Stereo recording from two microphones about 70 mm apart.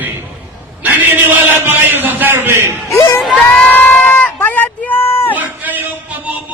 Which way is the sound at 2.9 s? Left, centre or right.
Left.